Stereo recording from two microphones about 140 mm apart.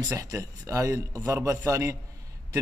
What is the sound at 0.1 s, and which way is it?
Speech, 25° right (ahead or behind).